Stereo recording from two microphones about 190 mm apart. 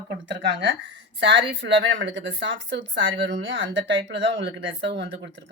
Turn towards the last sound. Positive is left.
turn(degrees=-65)  # may be behind; listen again after turning